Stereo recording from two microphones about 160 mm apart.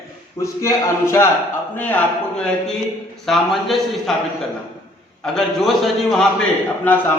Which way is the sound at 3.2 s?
Centre (ahead or behind).